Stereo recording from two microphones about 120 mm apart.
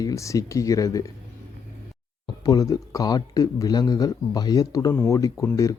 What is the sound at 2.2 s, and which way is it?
Speech, 35° left (ahead or behind).